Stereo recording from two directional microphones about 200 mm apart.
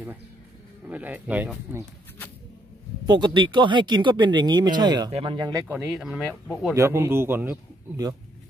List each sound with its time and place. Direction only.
0.8 s speech: 10° right (ahead or behind)
3.1 s speech: 20° right (ahead or behind); by 6.5 s 5° right (ahead or behind)
6.7 s speech: 15° right (ahead or behind)